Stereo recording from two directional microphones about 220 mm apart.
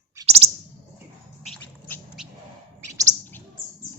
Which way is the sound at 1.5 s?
10° left (ahead or behind).